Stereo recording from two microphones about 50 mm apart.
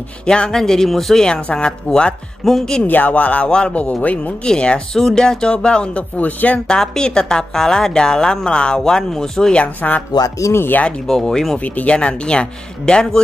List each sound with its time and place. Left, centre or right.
0.3 s speech: centre
1.3 s speech: centre
2.4 s speech: centre
2.8 s speech: left
3.4 s speech: centre
4.5 s speech: centre
4.9 s speech: centre
6.1 s speech: left
6.7 s speech: centre
9.8 s speech: left
10.4 s speech: left
11.1 s speech: centre
11.6 s speech: left